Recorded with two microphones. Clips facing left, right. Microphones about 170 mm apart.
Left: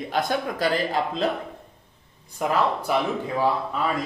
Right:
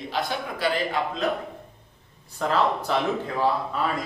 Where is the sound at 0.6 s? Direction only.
35° left (ahead or behind).